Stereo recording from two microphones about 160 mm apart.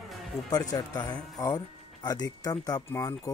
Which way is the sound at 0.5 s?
25° left (ahead or behind).